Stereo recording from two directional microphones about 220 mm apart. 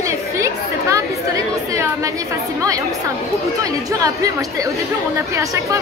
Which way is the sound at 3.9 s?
15° right (ahead or behind).